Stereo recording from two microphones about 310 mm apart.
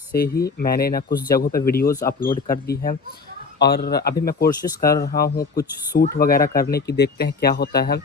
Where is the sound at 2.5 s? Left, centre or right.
Left.